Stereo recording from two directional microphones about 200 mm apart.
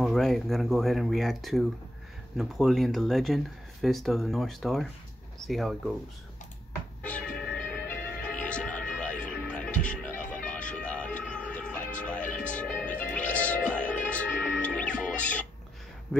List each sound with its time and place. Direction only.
0.0 s speech: centre (ahead or behind)
7.0 s music: 5° left (ahead or behind)
16.1 s speech: 5° left (ahead or behind)